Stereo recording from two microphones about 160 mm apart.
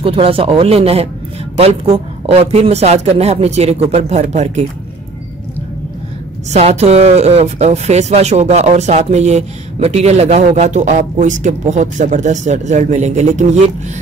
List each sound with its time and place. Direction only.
0.0 s speech: 35° right (ahead or behind)
6.5 s speech: 45° right (ahead or behind)